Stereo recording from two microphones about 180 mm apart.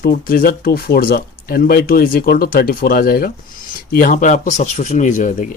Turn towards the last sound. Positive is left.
turn(degrees=45)  # may be behind; listen again after turning